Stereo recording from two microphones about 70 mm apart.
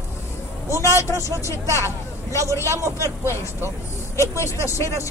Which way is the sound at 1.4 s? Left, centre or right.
Left.